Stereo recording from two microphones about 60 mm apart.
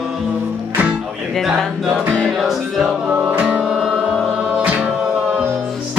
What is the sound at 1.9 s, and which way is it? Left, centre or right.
Music, right.